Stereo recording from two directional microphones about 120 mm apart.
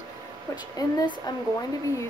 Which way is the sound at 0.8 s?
35° left (ahead or behind).